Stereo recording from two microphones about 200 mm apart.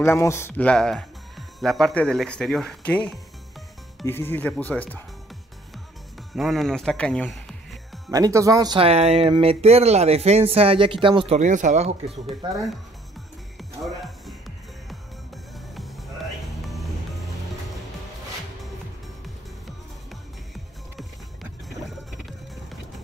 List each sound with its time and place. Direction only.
0.0 s speech: 15° left (ahead or behind)
6.3 s speech: centre (ahead or behind)
8.1 s speech: 15° right (ahead or behind)
13.6 s music: centre (ahead or behind)
19.2 s music: centre (ahead or behind)
21.4 s rowboat: centre (ahead or behind)